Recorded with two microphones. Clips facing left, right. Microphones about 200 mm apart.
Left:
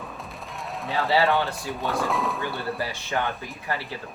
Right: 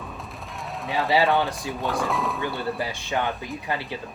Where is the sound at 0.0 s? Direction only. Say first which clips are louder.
Even; centre (ahead or behind).